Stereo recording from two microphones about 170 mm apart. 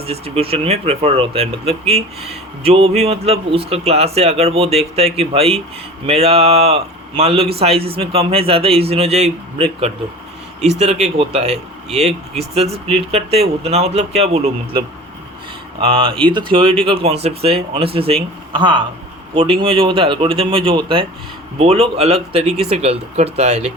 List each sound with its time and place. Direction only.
0.0 s speech: 35° right (ahead or behind)
11.2 s speech: 40° right (ahead or behind)